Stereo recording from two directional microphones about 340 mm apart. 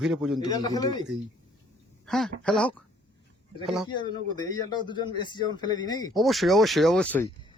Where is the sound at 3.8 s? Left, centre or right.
Centre.